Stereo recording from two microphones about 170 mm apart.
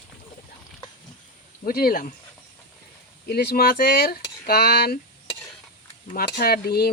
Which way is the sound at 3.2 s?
65° left (ahead or behind).